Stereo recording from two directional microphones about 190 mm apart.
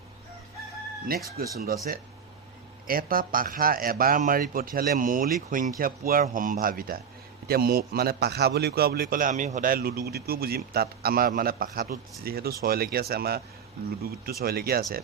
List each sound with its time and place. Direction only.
1.0 s a man's voice: 55° right (ahead or behind)
2.8 s a man's voice: 50° right (ahead or behind)